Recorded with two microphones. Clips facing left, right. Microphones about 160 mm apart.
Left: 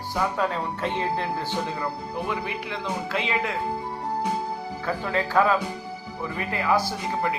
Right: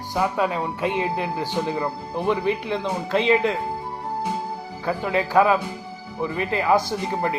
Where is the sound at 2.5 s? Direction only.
30° right (ahead or behind).